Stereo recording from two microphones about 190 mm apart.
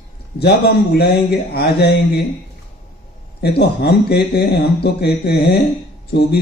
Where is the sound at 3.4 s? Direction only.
60° left (ahead or behind).